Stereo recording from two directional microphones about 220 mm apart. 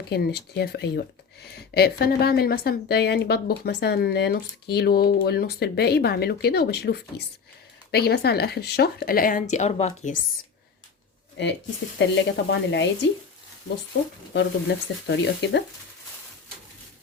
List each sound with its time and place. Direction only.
0.1 s a woman's voice: 45° left (ahead or behind)
11.9 s a woman's voice: 50° left (ahead or behind)
14.3 s a woman's voice: 50° left (ahead or behind)